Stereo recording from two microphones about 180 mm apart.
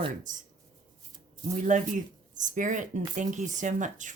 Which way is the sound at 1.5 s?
45° right (ahead or behind).